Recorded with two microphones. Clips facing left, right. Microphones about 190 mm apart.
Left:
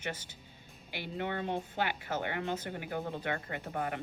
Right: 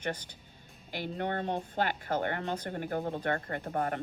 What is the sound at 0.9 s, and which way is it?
Speech, 50° right (ahead or behind).